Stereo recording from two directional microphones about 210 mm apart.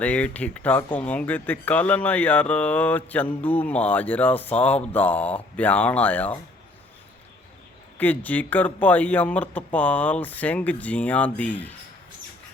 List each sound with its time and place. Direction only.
0.0 s speech: 5° left (ahead or behind)
7.9 s speech: 10° left (ahead or behind)